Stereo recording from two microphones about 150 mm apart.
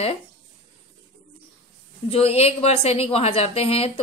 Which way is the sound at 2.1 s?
40° left (ahead or behind).